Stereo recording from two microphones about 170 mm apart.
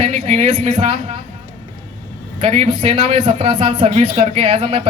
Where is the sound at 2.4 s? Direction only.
35° right (ahead or behind).